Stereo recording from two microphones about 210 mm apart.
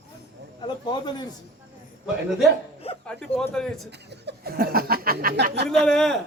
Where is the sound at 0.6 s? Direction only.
20° left (ahead or behind).